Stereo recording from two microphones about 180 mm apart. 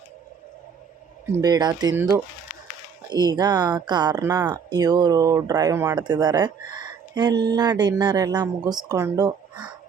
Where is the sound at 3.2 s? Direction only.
20° right (ahead or behind).